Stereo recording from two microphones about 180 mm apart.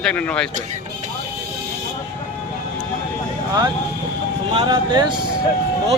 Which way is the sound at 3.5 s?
20° right (ahead or behind).